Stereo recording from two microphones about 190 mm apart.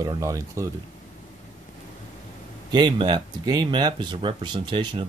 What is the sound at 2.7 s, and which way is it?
Speech, 25° right (ahead or behind).